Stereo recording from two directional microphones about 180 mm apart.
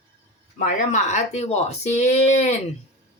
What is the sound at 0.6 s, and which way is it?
Speech, 40° left (ahead or behind).